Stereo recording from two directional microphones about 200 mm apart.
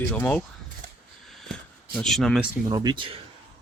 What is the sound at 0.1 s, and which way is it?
Speech, 10° left (ahead or behind).